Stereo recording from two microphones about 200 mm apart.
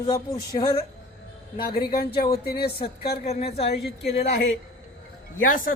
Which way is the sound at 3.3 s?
30° left (ahead or behind).